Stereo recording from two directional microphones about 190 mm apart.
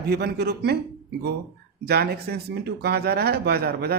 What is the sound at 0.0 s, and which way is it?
Speech, 60° right (ahead or behind).